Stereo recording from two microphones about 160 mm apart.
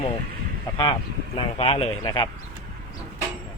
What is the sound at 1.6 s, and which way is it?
Speech, 35° left (ahead or behind).